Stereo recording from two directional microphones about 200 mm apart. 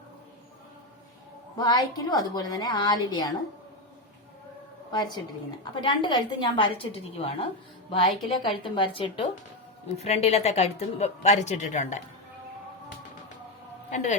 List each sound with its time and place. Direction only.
1.5 s a woman's voice: 20° left (ahead or behind)
5.8 s a woman's voice: 25° left (ahead or behind)
13.9 s a woman's voice: 40° left (ahead or behind)